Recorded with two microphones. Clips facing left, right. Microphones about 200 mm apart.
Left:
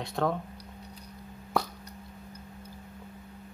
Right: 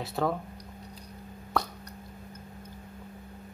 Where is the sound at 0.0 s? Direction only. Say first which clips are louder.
Even; 5° right (ahead or behind).